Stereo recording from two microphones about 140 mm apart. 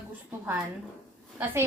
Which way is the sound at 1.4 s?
15° right (ahead or behind).